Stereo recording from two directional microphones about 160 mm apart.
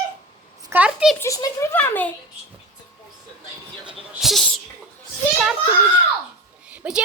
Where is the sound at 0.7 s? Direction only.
10° right (ahead or behind).